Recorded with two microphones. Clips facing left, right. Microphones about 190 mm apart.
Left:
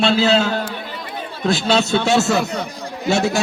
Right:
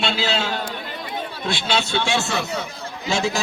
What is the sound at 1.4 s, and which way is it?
A man's voice, 40° left (ahead or behind).